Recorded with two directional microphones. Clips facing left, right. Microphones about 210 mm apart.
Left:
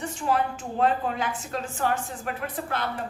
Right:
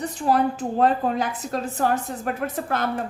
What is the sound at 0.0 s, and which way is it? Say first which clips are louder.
A woman's voice: right 5 dB; 40° right (ahead or behind).